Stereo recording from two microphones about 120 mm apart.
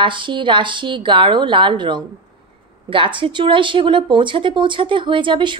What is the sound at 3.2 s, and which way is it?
A woman's voice, 45° right (ahead or behind).